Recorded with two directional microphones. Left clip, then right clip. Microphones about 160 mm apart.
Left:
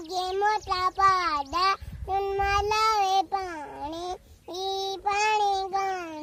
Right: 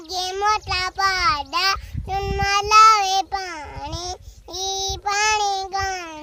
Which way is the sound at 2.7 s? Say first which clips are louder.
Right 13 dB; 45° right (ahead or behind).